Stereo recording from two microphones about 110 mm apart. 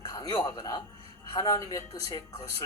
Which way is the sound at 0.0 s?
35° left (ahead or behind).